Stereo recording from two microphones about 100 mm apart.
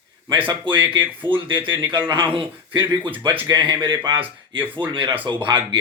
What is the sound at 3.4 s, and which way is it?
Speech, 45° right (ahead or behind).